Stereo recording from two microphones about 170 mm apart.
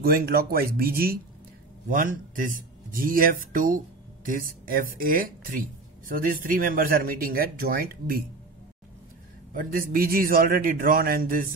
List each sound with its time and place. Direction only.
0.0 s speech: 60° right (ahead or behind)
9.5 s speech: 55° right (ahead or behind)